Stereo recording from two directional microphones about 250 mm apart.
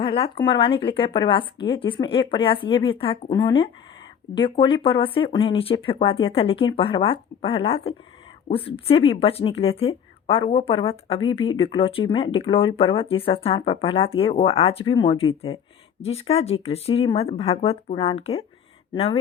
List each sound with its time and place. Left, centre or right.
0.0 s speech: left